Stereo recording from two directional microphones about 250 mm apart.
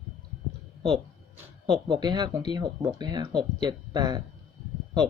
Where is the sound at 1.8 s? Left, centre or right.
Centre.